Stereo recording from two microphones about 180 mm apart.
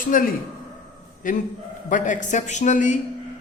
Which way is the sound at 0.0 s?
50° left (ahead or behind).